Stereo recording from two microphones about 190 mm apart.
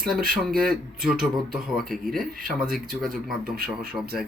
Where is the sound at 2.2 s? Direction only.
50° right (ahead or behind).